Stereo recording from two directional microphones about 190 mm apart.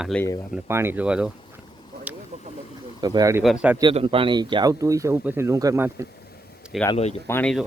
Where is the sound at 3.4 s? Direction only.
5° right (ahead or behind).